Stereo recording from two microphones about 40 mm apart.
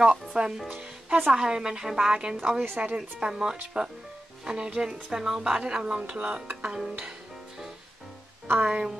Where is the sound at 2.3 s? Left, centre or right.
Centre.